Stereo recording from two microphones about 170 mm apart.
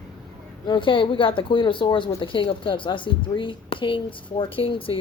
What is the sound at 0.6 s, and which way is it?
Speech, 30° left (ahead or behind).